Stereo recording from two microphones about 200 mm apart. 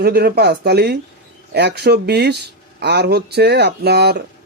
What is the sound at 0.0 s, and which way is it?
Speech, 50° right (ahead or behind).